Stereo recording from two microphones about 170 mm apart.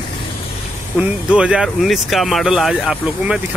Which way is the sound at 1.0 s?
10° right (ahead or behind).